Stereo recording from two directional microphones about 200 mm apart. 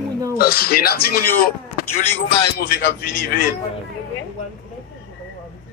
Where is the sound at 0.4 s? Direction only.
50° left (ahead or behind).